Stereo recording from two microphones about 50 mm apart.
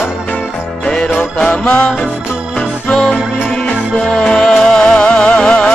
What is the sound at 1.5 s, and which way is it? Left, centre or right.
Music, left.